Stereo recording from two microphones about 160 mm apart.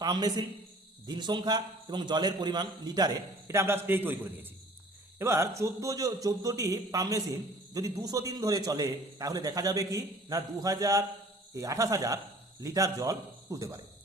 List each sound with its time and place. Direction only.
0.0 s a man's voice: 25° right (ahead or behind)